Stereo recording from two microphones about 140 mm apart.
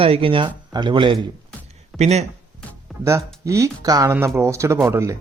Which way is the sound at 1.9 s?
50° right (ahead or behind).